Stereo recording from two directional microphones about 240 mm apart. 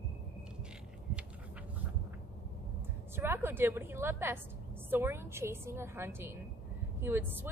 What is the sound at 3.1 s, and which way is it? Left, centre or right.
A woman's voice, centre.